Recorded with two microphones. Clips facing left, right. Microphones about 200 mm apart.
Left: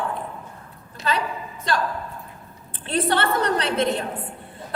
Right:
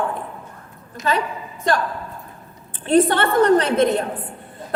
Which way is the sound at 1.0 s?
35° left (ahead or behind).